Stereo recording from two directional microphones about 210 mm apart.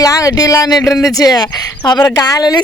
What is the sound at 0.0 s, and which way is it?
Speech, 15° left (ahead or behind).